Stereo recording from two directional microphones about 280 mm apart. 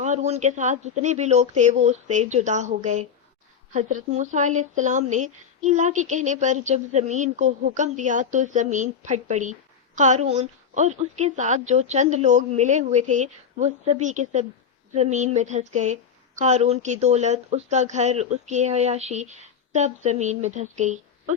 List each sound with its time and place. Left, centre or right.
0.0 s speech: right